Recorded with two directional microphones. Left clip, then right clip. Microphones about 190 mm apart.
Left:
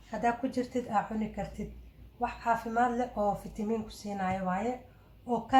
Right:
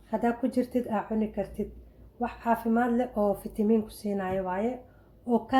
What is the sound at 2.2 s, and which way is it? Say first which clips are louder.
Speech: right 2 dB; 45° right (ahead or behind).